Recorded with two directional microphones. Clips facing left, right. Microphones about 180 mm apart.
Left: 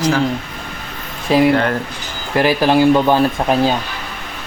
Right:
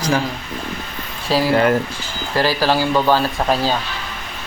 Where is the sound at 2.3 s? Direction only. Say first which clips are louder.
Left 4 dB; 20° left (ahead or behind).